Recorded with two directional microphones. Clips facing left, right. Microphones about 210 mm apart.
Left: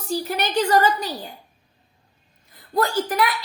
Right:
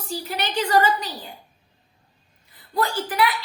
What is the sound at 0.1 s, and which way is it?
A woman's voice, 45° left (ahead or behind).